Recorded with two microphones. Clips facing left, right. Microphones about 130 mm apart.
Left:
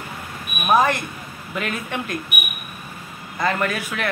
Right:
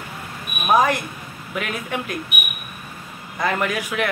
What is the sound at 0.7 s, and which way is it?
Speech, 15° right (ahead or behind).